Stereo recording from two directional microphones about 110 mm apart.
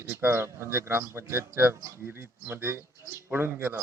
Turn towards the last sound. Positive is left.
turn(degrees=-20)  # may be behind; listen again after turning